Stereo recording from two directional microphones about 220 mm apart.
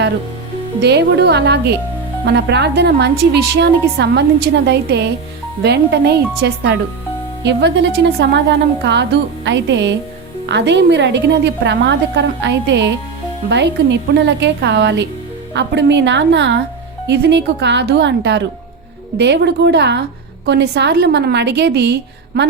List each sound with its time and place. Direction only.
0.8 s a woman's voice: 50° right (ahead or behind)